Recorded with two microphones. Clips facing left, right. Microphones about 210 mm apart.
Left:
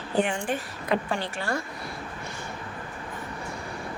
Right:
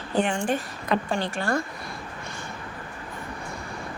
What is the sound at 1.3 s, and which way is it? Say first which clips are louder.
Speech: right 4 dB; 50° right (ahead or behind).